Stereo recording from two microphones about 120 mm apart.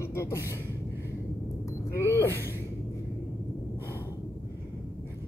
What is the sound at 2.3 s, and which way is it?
Gasp, 20° right (ahead or behind).